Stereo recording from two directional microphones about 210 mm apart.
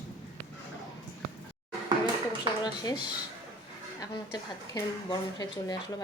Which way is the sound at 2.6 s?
20° left (ahead or behind).